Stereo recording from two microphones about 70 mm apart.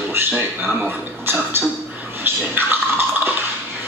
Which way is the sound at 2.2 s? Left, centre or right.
Right.